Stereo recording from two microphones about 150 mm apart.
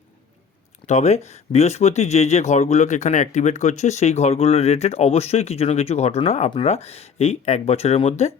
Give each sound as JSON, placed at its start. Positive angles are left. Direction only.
{"t": 0.9, "sound": "speech", "side_deg": 50}